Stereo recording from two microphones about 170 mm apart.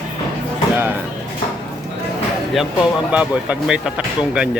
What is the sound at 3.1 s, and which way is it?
Speech, 5° right (ahead or behind).